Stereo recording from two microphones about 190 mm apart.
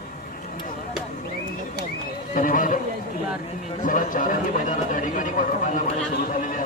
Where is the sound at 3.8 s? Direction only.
45° left (ahead or behind).